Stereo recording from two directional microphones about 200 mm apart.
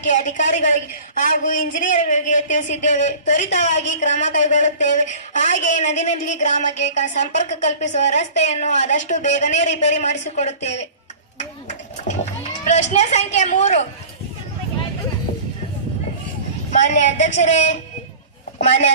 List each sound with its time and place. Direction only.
0.0 s speech: 35° left (ahead or behind)
11.3 s a sound: 35° left (ahead or behind)
12.9 s speech: 35° left (ahead or behind)
16.7 s speech: 35° left (ahead or behind)